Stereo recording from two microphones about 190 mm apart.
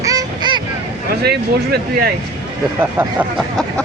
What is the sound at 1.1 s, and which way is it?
Speech, 55° right (ahead or behind).